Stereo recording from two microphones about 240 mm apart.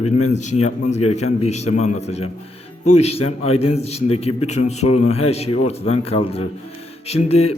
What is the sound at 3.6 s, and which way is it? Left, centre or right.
A man's voice, left.